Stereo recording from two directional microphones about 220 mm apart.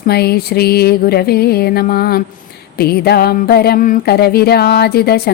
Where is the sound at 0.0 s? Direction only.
45° left (ahead or behind).